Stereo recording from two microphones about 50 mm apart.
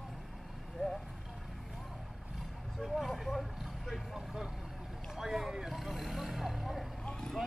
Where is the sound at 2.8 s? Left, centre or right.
Centre.